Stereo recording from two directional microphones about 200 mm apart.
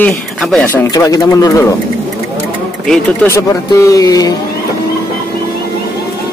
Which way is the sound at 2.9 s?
10° left (ahead or behind).